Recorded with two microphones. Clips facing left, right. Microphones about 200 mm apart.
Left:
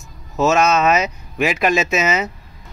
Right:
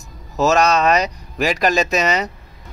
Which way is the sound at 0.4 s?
Centre (ahead or behind).